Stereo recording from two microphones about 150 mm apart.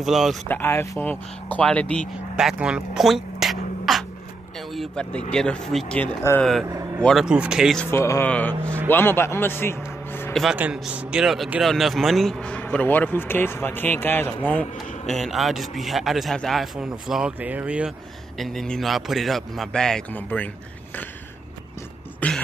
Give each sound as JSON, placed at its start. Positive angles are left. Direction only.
{"t": 0.0, "sound": "speech", "side_deg": 0}
{"t": 0.5, "sound": "speech", "side_deg": 15}
{"t": 2.3, "sound": "speech", "side_deg": -5}
{"t": 6.2, "sound": "speech", "side_deg": 20}
{"t": 6.6, "sound": "speech", "side_deg": -20}
{"t": 7.0, "sound": "speech", "side_deg": 5}
{"t": 7.9, "sound": "a man's voice", "side_deg": 15}
{"t": 10.3, "sound": "speech", "side_deg": 0}
{"t": 18.4, "sound": "speech", "side_deg": 0}
{"t": 22.2, "sound": "throat clearing", "side_deg": 10}